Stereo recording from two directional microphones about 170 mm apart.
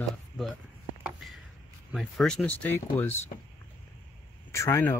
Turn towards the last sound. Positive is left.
turn(degrees=15)  # may be behind; listen again after turning